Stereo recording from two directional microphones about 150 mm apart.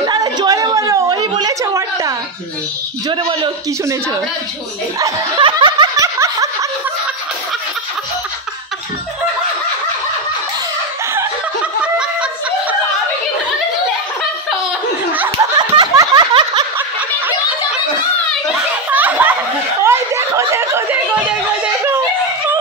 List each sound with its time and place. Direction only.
0.0 s a sound: 25° right (ahead or behind)
3.1 s speech: 30° right (ahead or behind)
5.4 s snicker: 30° right (ahead or behind)
6.1 s snicker: 20° right (ahead or behind)
11.8 s snicker: 5° right (ahead or behind)
15.5 s a sound: 30° right (ahead or behind)
18.9 s snicker: 10° right (ahead or behind)